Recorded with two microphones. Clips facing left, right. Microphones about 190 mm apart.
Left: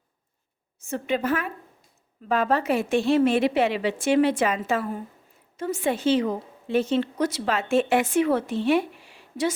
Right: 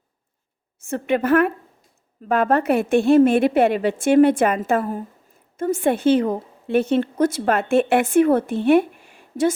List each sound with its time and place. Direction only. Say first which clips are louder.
0.9 s a woman's voice: right 6 dB; 55° right (ahead or behind)